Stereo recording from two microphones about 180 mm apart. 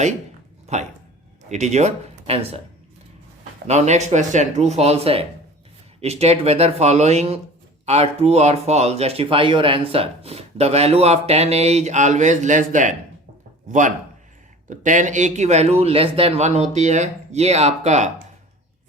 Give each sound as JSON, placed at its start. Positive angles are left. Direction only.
{"t": 0.7, "sound": "speech", "side_deg": -40}
{"t": 3.7, "sound": "a man's voice", "side_deg": -40}